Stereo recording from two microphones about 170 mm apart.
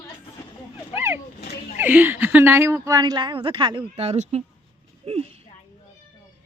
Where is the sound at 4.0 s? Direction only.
40° right (ahead or behind).